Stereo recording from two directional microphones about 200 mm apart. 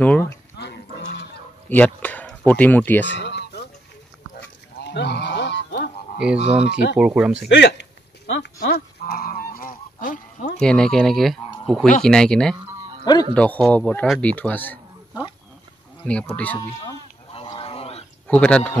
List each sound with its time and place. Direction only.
0.0 s speech: 5° left (ahead or behind)
0.6 s music: 55° left (ahead or behind)
1.7 s speech: 10° left (ahead or behind)
3.1 s a sound: 60° left (ahead or behind)
4.7 s goose: 55° left (ahead or behind)
6.1 s speech: 5° right (ahead or behind)
7.4 s speech: 60° left (ahead or behind)
8.5 s goose: 50° left (ahead or behind)
10.6 s speech: 5° left (ahead or behind)
13.0 s speech: 20° left (ahead or behind)
13.3 s speech: 5° left (ahead or behind)
16.0 s speech: 10° left (ahead or behind)
17.3 s goose: 30° left (ahead or behind)
18.2 s speech: 5° left (ahead or behind)